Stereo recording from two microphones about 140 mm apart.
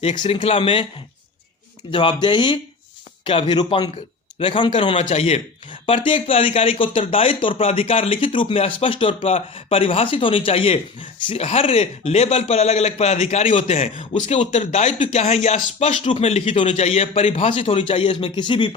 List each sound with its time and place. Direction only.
0.3 s speech: 45° left (ahead or behind)
1.9 s speech: 35° left (ahead or behind)
4.9 s a man's voice: 50° left (ahead or behind)
16.1 s a man's voice: 45° left (ahead or behind)